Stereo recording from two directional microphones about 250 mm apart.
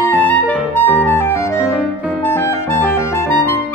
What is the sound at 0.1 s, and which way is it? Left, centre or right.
Clarinet, centre.